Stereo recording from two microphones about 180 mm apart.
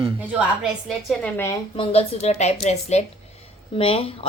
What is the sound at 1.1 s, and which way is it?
Speech, 5° left (ahead or behind).